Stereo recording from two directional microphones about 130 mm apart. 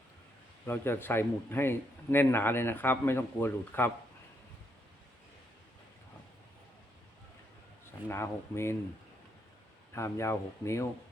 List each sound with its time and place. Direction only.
0.6 s a man's voice: 15° left (ahead or behind)
8.0 s speech: 20° left (ahead or behind)
9.9 s speech: 20° left (ahead or behind)